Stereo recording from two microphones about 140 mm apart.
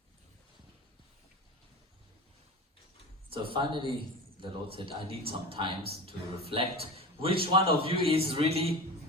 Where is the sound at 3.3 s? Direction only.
40° right (ahead or behind).